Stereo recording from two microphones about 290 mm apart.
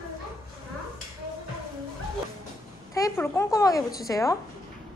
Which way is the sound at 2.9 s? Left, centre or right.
Centre.